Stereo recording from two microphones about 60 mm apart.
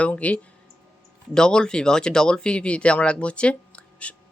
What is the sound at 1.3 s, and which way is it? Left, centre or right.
Speech, centre.